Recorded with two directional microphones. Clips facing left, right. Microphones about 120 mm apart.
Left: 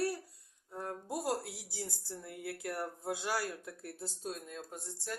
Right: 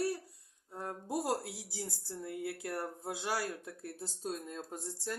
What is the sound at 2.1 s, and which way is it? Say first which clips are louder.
Speech: right 3 dB; 25° right (ahead or behind).